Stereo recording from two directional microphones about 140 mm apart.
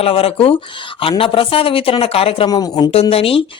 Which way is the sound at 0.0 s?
45° left (ahead or behind).